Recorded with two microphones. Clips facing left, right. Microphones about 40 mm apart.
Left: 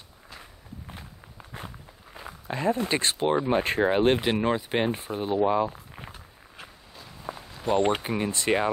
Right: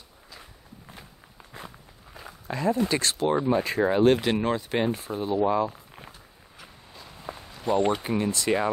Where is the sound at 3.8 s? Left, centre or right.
Left.